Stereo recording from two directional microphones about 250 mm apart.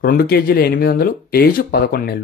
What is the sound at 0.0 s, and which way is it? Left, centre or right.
Speech, left.